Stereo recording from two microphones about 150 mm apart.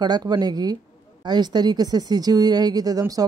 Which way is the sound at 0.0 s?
25° right (ahead or behind).